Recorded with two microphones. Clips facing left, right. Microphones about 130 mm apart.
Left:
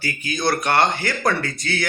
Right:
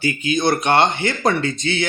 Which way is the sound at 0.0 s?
20° right (ahead or behind).